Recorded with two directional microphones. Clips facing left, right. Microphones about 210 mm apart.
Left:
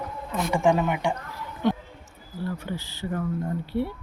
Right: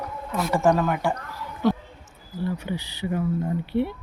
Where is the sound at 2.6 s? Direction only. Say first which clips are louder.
Right 3 dB; 15° right (ahead or behind).